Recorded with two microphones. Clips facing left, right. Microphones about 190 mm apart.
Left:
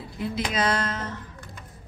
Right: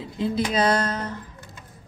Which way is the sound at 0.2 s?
35° right (ahead or behind).